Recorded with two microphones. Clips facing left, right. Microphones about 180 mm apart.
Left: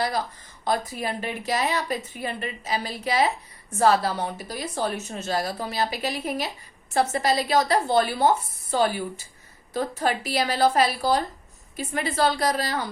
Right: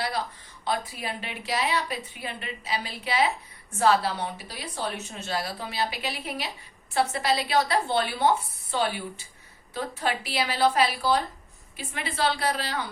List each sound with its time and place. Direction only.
0.6 s a woman's voice: 45° left (ahead or behind)